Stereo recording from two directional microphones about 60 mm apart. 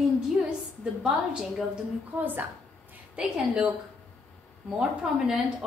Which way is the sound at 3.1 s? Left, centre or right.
Centre.